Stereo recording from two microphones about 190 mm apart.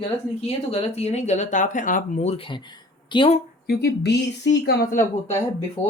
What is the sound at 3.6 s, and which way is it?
Speech, 60° left (ahead or behind).